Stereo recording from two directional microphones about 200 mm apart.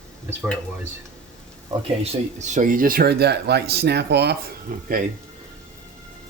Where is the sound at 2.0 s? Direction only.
35° right (ahead or behind).